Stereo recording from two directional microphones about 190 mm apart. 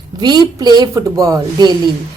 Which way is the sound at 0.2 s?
20° right (ahead or behind).